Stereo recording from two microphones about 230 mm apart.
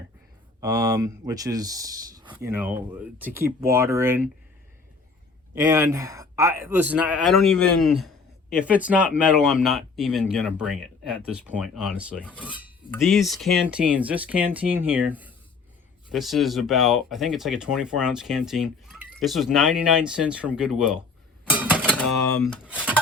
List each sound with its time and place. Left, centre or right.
0.6 s speech: centre
5.7 s speech: centre
21.8 s speech: centre